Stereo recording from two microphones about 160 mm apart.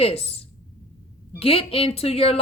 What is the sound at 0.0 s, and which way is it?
A woman's voice, 40° left (ahead or behind).